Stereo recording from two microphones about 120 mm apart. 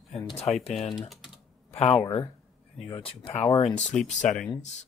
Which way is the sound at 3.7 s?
5° left (ahead or behind).